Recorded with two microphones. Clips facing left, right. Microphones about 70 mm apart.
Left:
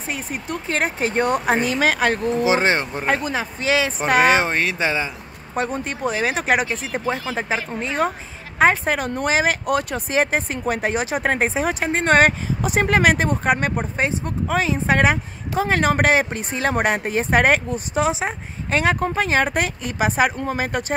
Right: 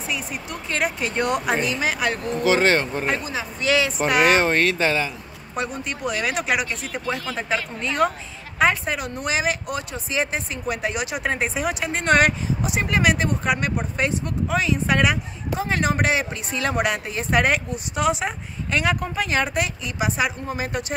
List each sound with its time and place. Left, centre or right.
0.1 s speech: left
2.4 s speech: centre
4.3 s speech: centre
8.5 s speech: left
13.9 s speech: left